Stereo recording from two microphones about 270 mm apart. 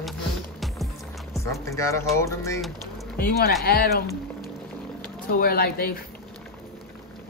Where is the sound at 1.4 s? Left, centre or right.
Centre.